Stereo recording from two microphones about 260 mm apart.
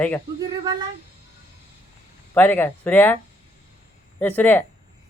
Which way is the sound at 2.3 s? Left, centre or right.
Centre.